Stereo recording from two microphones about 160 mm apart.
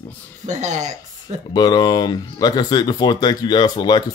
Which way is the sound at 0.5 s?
50° right (ahead or behind).